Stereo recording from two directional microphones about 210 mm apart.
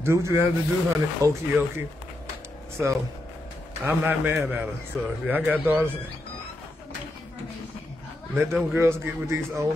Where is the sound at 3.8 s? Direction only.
10° right (ahead or behind).